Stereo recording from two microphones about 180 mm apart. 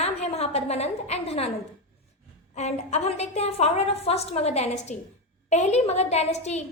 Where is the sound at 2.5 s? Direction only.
40° left (ahead or behind).